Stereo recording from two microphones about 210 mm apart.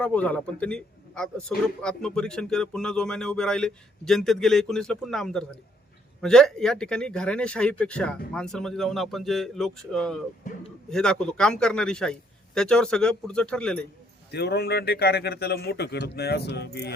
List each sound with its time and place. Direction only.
0.0 s a man's voice: 5° left (ahead or behind)
14.3 s a man's voice: 50° left (ahead or behind)